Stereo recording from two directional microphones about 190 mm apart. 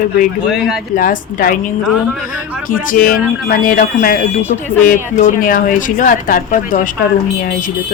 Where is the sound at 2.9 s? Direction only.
50° left (ahead or behind).